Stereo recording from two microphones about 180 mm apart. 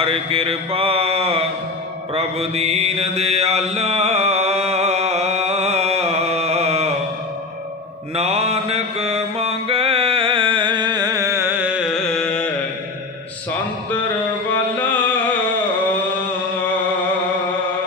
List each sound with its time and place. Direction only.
0.0 s mantra: 30° right (ahead or behind)
8.2 s mantra: 35° right (ahead or behind); by 12.4 s 5° left (ahead or behind)